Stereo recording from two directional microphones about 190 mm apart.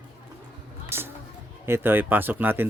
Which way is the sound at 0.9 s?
15° right (ahead or behind).